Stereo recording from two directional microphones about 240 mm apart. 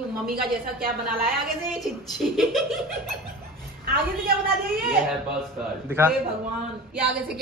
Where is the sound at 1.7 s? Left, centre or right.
Centre.